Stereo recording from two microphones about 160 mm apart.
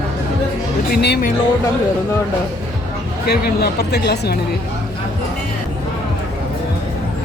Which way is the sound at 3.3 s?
80° left.